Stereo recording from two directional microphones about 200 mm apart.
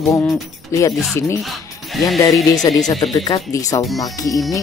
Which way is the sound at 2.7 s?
20° left (ahead or behind).